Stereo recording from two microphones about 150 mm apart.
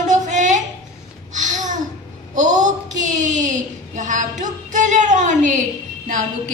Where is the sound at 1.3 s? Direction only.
55° right (ahead or behind).